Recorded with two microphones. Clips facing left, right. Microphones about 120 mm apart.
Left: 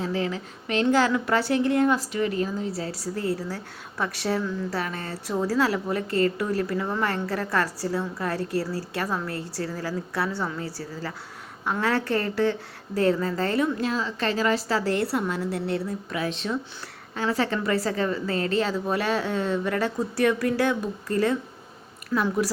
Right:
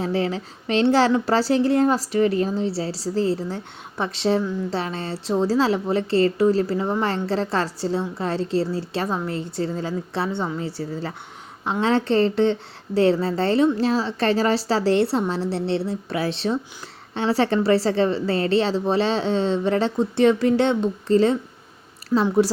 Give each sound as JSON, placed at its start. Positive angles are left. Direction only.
{"t": 0.0, "sound": "a woman's voice", "side_deg": -35}